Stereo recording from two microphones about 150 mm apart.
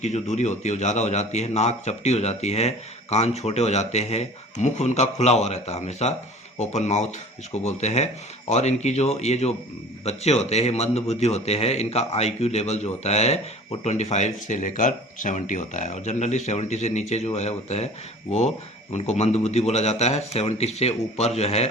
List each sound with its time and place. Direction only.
0.0 s a man's voice: 50° left (ahead or behind)